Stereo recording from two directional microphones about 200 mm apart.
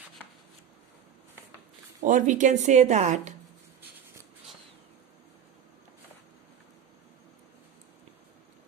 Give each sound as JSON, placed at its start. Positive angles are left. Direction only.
{"t": 2.0, "sound": "speech", "side_deg": -40}